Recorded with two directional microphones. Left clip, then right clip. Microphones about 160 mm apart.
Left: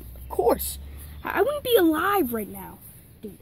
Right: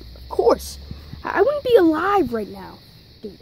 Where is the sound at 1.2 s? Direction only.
45° left (ahead or behind).